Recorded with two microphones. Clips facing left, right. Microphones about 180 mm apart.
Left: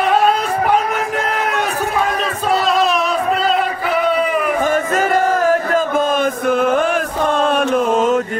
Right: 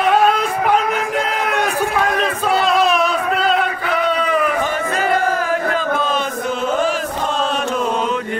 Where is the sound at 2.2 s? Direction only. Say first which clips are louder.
Even; centre (ahead or behind).